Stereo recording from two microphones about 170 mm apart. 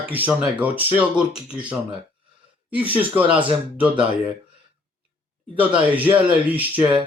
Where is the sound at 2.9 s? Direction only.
10° right (ahead or behind).